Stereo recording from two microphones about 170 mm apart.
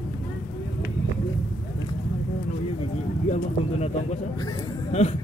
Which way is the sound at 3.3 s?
40° left (ahead or behind).